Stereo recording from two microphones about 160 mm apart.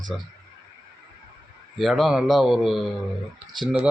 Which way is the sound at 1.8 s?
Centre (ahead or behind).